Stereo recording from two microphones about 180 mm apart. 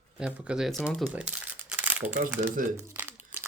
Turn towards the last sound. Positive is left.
turn(degrees=-10)  # may be behind; listen again after turning